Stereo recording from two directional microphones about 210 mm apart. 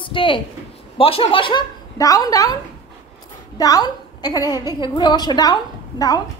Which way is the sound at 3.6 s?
20° left (ahead or behind).